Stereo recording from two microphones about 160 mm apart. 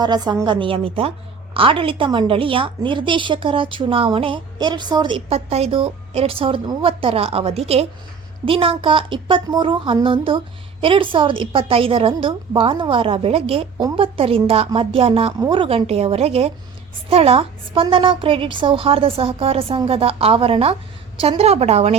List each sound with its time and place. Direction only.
0.0 s a woman's voice: 25° right (ahead or behind)